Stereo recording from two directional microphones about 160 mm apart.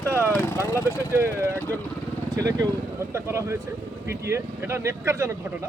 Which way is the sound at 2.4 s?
20° right (ahead or behind).